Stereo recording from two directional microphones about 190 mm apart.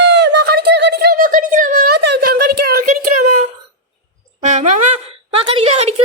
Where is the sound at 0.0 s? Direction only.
65° right (ahead or behind).